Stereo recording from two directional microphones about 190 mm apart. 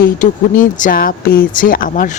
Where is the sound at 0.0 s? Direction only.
45° left (ahead or behind).